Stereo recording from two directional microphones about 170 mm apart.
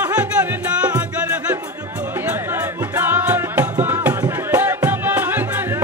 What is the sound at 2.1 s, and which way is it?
Music, 10° right (ahead or behind).